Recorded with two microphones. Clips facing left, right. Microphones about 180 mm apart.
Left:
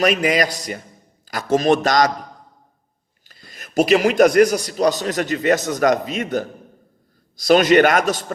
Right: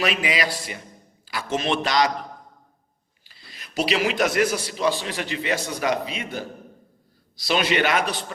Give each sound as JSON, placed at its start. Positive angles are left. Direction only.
{"t": 0.0, "sound": "a man's voice", "side_deg": 45}
{"t": 3.2, "sound": "a man's voice", "side_deg": 45}